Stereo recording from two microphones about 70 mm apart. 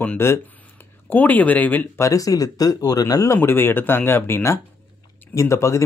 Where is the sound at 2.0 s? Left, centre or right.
Left.